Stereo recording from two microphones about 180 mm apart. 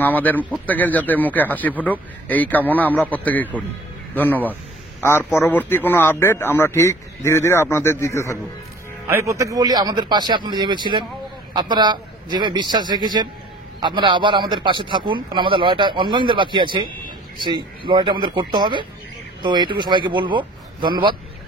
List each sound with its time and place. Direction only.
0.0 s a man's voice: 10° left (ahead or behind)
9.0 s a man's voice: 15° right (ahead or behind)
17.8 s a man's voice: 25° right (ahead or behind)